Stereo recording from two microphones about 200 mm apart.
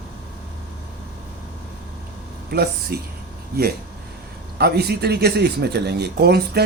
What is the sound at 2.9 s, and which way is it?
Speech, 50° right (ahead or behind).